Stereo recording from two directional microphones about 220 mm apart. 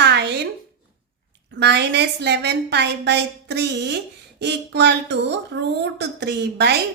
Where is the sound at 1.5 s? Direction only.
50° right (ahead or behind).